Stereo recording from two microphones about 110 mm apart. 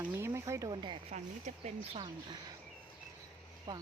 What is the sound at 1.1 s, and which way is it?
Speech, 90° right.